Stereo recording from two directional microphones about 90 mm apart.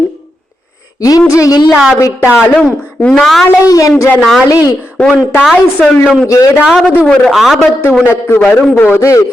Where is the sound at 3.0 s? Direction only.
5° left (ahead or behind).